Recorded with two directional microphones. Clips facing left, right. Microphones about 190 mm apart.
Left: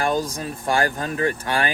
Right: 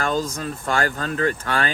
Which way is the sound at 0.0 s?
15° left (ahead or behind).